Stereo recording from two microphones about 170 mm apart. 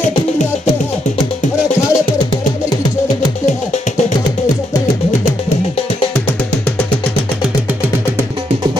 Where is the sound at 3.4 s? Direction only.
45° left (ahead or behind).